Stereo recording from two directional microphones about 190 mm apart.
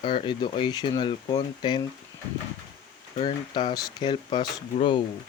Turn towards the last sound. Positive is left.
turn(degrees=25)  # may be behind; listen again after turning